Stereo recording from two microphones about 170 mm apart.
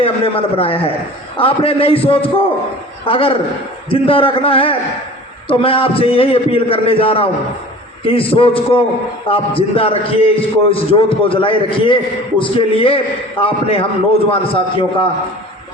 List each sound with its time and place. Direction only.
0.0 s a man's voice: 35° left (ahead or behind)
3.1 s a man's voice: 30° left (ahead or behind)